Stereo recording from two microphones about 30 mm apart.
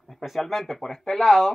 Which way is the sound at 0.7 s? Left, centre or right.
Centre.